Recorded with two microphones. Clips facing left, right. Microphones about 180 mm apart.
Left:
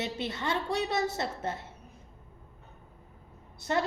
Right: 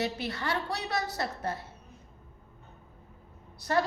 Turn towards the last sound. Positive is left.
turn(degrees=25)  # may be behind; listen again after turning